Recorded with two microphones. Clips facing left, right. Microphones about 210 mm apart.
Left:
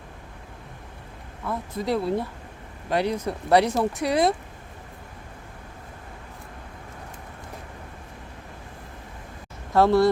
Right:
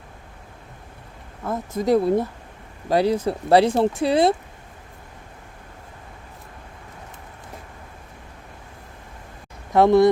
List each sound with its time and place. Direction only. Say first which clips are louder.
1.5 s speech: right 6 dB; 45° right (ahead or behind)
2.9 s speech: right 5 dB; 35° right (ahead or behind)
9.7 s speech: right 4 dB; 20° right (ahead or behind)